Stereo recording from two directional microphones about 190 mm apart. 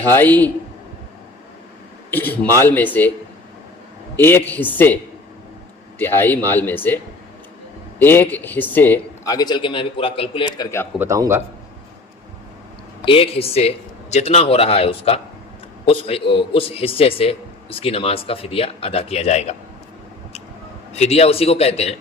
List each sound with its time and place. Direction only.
0.2 s a man's voice: 10° left (ahead or behind)
2.0 s a man's voice: 10° left (ahead or behind)
4.2 s a man's voice: 10° left (ahead or behind)
6.0 s a man's voice: 10° left (ahead or behind); by 10.7 s 30° left (ahead or behind)
10.9 s a man's voice: 15° right (ahead or behind)
13.1 s a man's voice: 30° left (ahead or behind)
20.9 s a man's voice: 35° left (ahead or behind)